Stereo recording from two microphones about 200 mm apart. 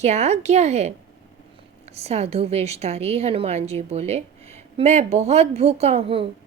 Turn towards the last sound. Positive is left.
turn(degrees=-30)  # may be behind; listen again after turning